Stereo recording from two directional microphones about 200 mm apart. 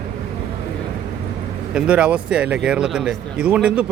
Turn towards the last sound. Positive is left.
turn(degrees=-5)  # may be behind; listen again after turning